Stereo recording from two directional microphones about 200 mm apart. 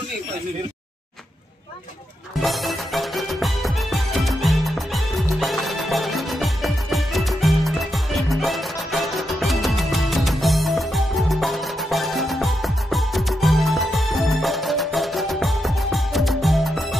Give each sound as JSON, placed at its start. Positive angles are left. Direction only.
{"t": 2.4, "sound": "music", "side_deg": 0}